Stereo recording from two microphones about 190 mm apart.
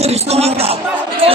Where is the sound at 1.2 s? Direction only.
30° right (ahead or behind).